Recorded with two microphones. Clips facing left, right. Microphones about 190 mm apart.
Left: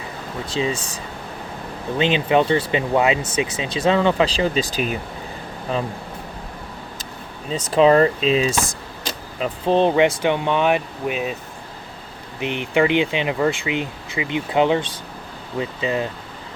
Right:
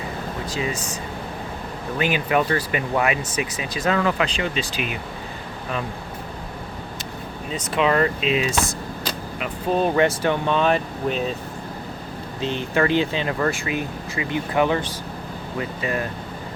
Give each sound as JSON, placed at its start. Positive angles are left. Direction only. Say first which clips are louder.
{"t": 0.5, "sound": "speech", "louder": "left 5 dB", "side_deg": 30}
{"t": 2.0, "sound": "speech", "louder": "left 4 dB", "side_deg": 25}
{"t": 7.5, "sound": "speech", "louder": "left 6 dB", "side_deg": 35}
{"t": 9.9, "sound": "speech", "louder": "left 2 dB", "side_deg": 15}
{"t": 12.4, "sound": "speech", "louder": "left 3 dB", "side_deg": 15}